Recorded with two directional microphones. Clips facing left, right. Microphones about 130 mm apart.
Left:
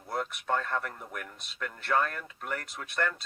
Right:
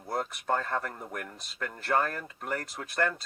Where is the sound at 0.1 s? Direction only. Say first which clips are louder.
Right 1 dB; 35° right (ahead or behind).